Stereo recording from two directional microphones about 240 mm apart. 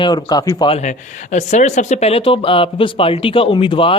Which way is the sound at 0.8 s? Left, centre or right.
Left.